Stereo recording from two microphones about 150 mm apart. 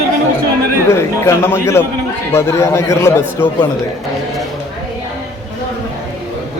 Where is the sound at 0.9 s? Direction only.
20° left (ahead or behind).